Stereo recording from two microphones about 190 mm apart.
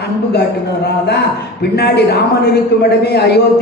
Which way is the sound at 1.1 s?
60° left (ahead or behind).